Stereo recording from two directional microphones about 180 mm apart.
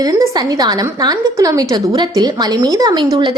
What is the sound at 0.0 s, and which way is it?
A woman's voice, 20° right (ahead or behind).